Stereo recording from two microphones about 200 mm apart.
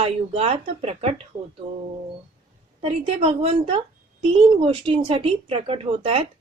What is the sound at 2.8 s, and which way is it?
Speech, 30° right (ahead or behind).